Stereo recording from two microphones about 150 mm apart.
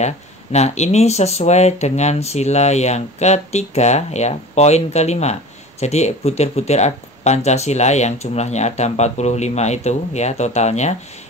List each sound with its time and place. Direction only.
0.0 s speech: 50° left (ahead or behind)